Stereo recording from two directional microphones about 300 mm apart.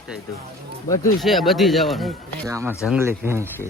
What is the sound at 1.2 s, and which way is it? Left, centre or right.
Speech, centre.